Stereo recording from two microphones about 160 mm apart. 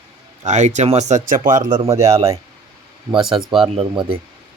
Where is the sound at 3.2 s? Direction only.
5° right (ahead or behind).